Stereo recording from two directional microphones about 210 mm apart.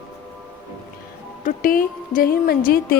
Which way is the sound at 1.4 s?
40° left (ahead or behind).